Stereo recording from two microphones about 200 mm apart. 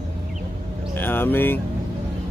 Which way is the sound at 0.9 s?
10° left (ahead or behind).